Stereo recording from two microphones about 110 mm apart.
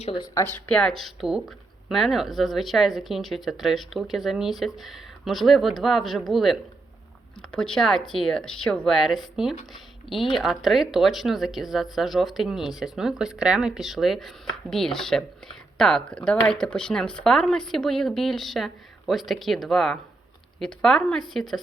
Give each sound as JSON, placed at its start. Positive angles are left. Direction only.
{"t": 0.3, "sound": "speech", "side_deg": 20}
{"t": 0.7, "sound": "a woman's voice", "side_deg": 5}